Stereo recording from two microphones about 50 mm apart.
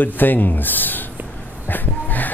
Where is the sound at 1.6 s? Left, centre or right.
Left.